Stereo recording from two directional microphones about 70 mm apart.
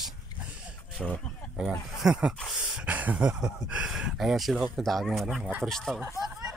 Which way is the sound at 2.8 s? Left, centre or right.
Right.